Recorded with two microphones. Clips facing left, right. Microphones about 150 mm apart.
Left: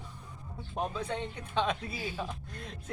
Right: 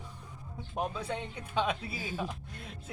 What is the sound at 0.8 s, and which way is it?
Speech, 10° right (ahead or behind).